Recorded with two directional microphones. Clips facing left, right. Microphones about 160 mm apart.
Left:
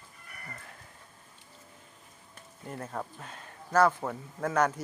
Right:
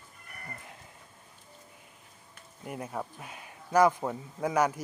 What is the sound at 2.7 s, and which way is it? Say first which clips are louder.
A man's voice: right 1 dB; 10° right (ahead or behind).